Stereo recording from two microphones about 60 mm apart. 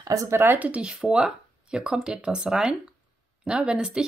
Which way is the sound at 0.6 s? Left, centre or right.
Centre.